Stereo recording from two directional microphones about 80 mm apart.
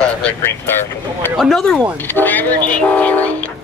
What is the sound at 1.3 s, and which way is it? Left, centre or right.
Speech, centre.